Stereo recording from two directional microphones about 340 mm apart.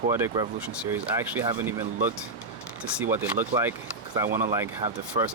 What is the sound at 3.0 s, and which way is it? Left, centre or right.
Speech, centre.